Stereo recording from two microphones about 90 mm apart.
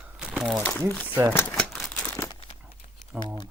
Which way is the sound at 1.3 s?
25° left (ahead or behind).